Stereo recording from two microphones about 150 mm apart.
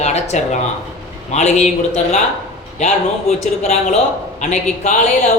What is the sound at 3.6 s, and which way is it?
A man's voice, 45° left (ahead or behind).